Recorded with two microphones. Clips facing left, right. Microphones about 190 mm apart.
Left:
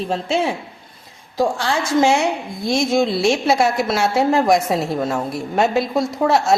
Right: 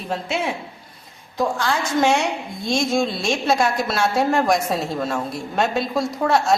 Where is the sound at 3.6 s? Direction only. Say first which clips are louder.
Left 3 dB; 25° left (ahead or behind).